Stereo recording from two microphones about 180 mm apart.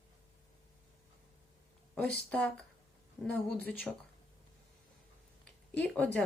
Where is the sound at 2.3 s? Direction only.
5° left (ahead or behind).